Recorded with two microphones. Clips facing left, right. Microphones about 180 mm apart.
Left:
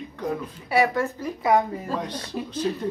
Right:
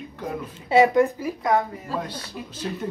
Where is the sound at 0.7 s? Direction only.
20° right (ahead or behind).